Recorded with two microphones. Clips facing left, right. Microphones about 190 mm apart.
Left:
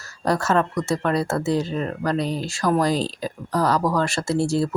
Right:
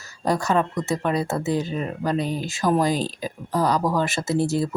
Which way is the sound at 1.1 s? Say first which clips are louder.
Left 2 dB; 20° right (ahead or behind).